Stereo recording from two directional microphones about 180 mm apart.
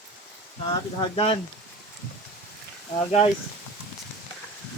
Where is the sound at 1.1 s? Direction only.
30° left (ahead or behind).